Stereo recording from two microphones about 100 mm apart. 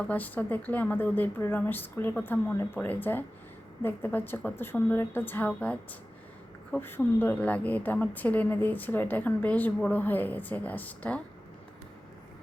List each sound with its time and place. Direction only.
0.1 s a woman's voice: 15° left (ahead or behind)